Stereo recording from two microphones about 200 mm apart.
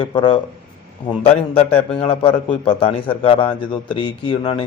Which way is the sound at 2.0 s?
25° left (ahead or behind).